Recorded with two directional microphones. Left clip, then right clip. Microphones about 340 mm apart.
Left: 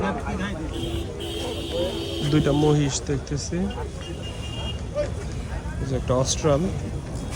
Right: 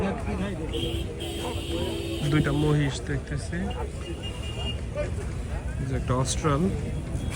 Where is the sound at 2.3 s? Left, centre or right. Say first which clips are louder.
Left 5 dB; centre.